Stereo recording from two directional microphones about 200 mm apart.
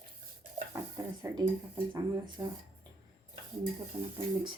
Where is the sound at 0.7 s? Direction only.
10° right (ahead or behind).